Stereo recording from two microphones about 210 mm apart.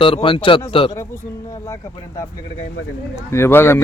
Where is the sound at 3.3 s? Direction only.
10° left (ahead or behind).